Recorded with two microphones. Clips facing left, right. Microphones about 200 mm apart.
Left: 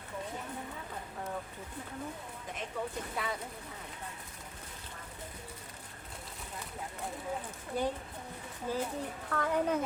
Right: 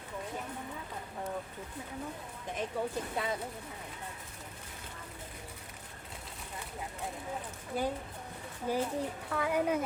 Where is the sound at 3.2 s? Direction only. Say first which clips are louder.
Right 2 dB; 25° right (ahead or behind).